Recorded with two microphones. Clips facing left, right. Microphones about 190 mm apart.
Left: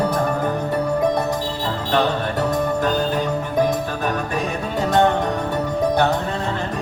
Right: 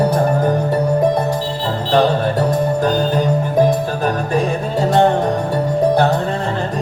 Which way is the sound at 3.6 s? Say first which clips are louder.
Right 4 dB; 30° right (ahead or behind).